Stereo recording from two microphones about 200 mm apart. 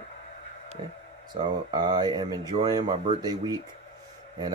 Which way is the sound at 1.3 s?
20° right (ahead or behind).